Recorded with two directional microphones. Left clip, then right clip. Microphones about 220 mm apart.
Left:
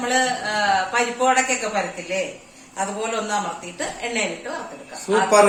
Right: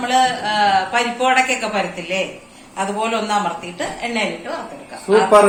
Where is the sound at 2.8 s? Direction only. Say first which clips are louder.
Right 4 dB; 15° left (ahead or behind).